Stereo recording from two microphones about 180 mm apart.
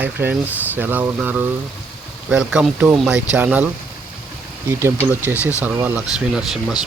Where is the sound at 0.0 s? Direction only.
10° right (ahead or behind).